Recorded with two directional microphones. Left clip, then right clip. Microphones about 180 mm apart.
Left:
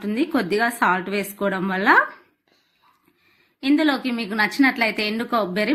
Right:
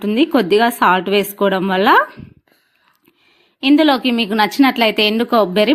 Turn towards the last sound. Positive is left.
turn(degrees=-35)  # may be behind; listen again after turning